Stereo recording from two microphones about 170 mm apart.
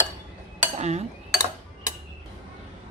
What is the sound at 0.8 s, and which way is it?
Cutlery, 40° right (ahead or behind).